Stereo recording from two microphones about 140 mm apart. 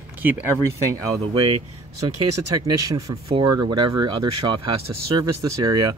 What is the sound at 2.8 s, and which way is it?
Speech, 25° right (ahead or behind).